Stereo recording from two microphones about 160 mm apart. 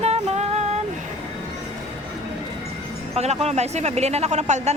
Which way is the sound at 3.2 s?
40° right (ahead or behind).